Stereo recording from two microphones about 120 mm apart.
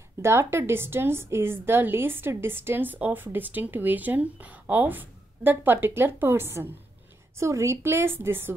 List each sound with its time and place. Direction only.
0.2 s a woman's voice: 20° right (ahead or behind)